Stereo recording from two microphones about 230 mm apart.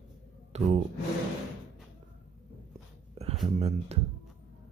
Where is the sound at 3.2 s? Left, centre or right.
Right.